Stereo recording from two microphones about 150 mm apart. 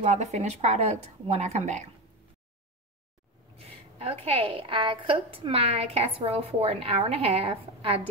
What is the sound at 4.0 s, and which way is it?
A woman's voice, 40° right (ahead or behind).